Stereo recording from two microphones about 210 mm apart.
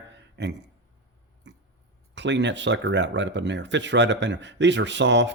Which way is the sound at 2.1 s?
55° right (ahead or behind).